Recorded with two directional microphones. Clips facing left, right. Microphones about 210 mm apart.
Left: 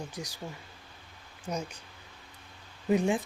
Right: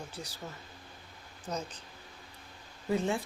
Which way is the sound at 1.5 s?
10° left (ahead or behind).